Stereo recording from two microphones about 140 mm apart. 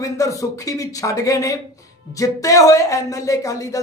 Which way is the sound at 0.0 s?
25° left (ahead or behind).